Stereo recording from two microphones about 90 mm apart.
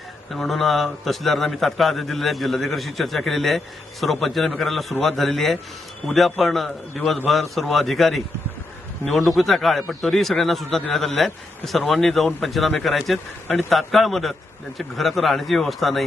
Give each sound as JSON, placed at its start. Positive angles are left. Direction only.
{"t": 0.3, "sound": "a man's voice", "side_deg": 0}